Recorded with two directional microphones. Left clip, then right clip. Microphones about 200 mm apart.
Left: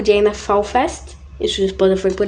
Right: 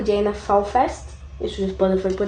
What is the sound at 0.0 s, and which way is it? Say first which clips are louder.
Speech: left 6 dB; 50° left (ahead or behind).